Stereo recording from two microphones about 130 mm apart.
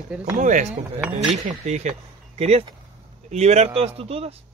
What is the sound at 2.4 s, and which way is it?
Speech, 50° right (ahead or behind).